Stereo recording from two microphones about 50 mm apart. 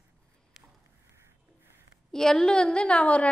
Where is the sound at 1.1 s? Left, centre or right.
Right.